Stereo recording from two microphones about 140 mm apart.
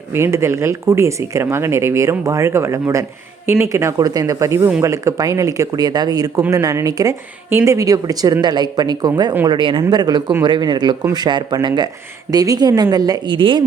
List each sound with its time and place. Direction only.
0.1 s speech: 20° right (ahead or behind); by 13.7 s 35° right (ahead or behind)